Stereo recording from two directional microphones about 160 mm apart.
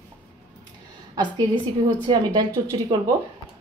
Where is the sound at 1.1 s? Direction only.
25° right (ahead or behind).